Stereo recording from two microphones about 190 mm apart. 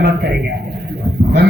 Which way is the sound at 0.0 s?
60° right (ahead or behind).